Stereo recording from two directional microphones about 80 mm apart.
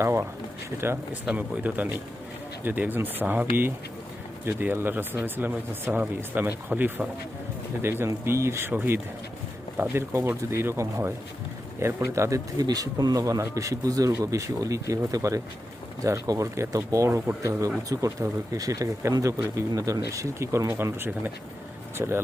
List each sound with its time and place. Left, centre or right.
0.0 s speech: right
1.2 s speech: centre; by 12.4 s right
12.5 s speech: right
17.8 s speech: right